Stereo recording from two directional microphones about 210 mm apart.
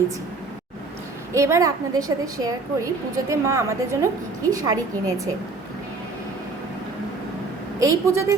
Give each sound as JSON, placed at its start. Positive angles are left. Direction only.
{"t": 1.3, "sound": "a woman's voice", "side_deg": -15}
{"t": 7.9, "sound": "a woman's voice", "side_deg": -15}